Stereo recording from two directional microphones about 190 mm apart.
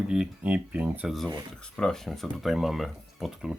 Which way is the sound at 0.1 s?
5° right (ahead or behind).